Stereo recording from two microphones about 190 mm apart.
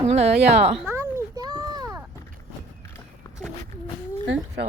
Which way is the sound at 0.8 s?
15° right (ahead or behind).